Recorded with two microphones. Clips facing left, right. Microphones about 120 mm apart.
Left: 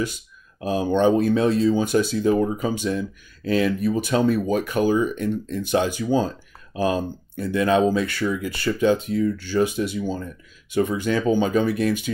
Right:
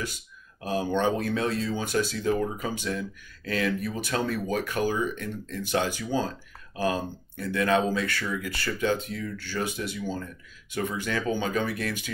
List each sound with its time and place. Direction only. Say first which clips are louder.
0.7 s speech: left 7 dB; 20° left (ahead or behind)